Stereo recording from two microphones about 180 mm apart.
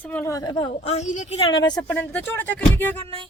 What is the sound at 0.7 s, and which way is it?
Speech, 35° left (ahead or behind).